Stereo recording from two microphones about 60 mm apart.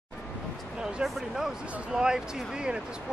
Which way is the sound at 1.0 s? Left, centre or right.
Centre.